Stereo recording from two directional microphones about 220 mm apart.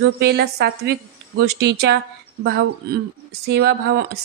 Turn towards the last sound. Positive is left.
turn(degrees=-50)  # may be behind; listen again after turning